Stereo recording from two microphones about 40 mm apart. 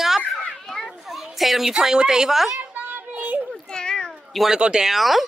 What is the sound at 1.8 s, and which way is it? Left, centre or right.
Speech, centre.